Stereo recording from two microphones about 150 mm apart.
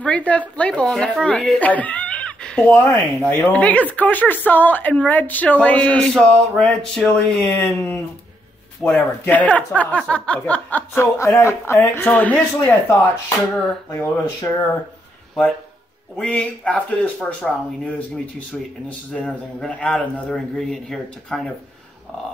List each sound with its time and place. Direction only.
0.0 s a man's voice: 10° left (ahead or behind)
16.2 s a man's voice: 10° left (ahead or behind)